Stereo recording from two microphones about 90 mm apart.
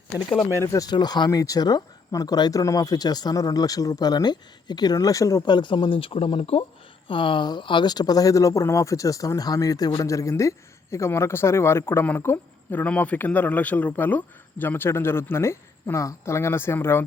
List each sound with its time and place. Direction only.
0.4 s speech: 35° left (ahead or behind)
0.9 s speech: 50° left (ahead or behind)
5.5 s speech: 60° left (ahead or behind); by 6.7 s 85° left
7.1 s speech: 70° left (ahead or behind); by 17.0 s 25° left (ahead or behind)